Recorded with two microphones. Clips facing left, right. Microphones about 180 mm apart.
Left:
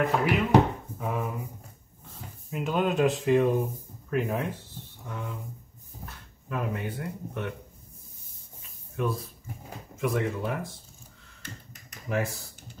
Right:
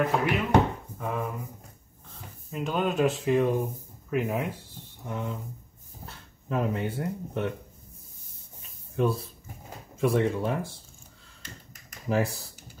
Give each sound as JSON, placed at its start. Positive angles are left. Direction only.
{"t": 0.0, "sound": "speech", "side_deg": 5}
{"t": 2.5, "sound": "speech", "side_deg": 0}
{"t": 4.1, "sound": "a sound", "side_deg": -10}
{"t": 6.0, "sound": "speech", "side_deg": -25}
{"t": 8.9, "sound": "speech", "side_deg": -30}
{"t": 12.1, "sound": "speech", "side_deg": -35}